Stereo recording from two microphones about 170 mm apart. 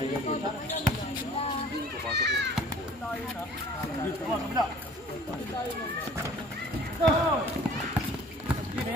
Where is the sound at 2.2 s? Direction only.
90° right.